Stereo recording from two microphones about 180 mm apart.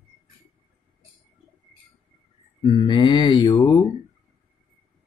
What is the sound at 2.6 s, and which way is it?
Mantra, 25° left (ahead or behind).